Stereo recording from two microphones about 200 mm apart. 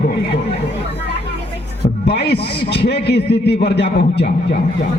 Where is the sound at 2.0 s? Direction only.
55° left (ahead or behind).